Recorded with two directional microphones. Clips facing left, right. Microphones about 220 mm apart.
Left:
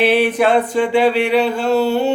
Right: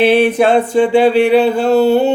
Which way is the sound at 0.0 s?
25° right (ahead or behind).